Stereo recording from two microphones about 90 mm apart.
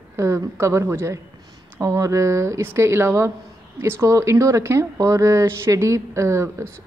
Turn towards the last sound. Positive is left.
turn(degrees=-35)  # may be behind; listen again after turning